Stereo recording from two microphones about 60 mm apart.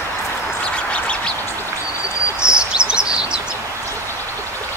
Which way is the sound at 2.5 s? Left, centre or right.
Centre.